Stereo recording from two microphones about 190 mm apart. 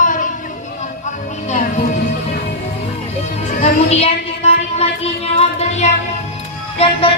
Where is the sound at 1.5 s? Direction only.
40° left (ahead or behind).